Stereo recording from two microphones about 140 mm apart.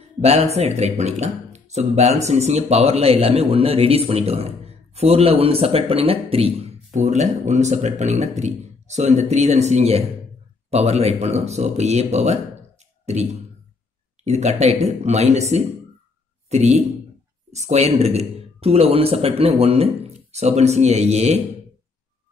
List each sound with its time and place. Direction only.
0.2 s speech: 50° right (ahead or behind)
7.0 s speech: 55° right (ahead or behind)